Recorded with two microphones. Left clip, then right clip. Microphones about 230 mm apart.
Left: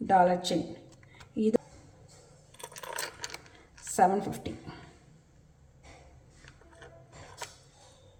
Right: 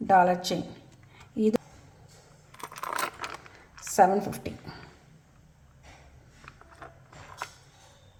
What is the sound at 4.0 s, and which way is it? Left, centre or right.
Speech, right.